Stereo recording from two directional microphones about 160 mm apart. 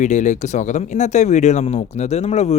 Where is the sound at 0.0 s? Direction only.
50° left (ahead or behind).